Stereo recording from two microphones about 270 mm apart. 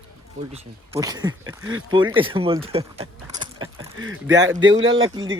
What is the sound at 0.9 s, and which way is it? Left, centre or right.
Speech, centre.